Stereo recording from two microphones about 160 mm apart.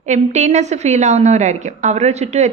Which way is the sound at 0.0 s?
45° right (ahead or behind).